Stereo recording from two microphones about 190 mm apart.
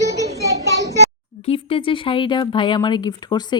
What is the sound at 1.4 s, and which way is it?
Speech, 30° left (ahead or behind).